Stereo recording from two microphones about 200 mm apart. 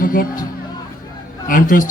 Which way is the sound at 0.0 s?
45° left (ahead or behind).